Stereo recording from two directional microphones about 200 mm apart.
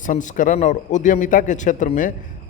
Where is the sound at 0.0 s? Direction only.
40° left (ahead or behind).